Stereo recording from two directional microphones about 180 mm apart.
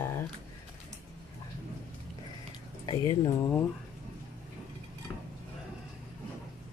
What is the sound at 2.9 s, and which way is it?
Speech, 20° left (ahead or behind).